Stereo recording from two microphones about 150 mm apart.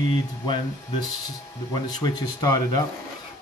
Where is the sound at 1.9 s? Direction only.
25° left (ahead or behind).